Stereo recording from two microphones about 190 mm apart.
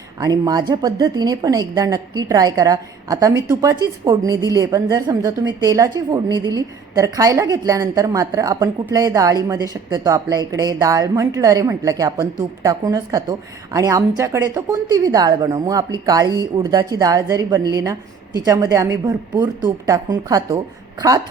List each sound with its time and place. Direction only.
0.2 s a woman's voice: 20° right (ahead or behind)